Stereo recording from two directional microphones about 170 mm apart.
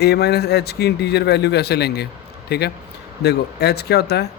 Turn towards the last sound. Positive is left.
turn(degrees=70)  # may be behind; listen again after turning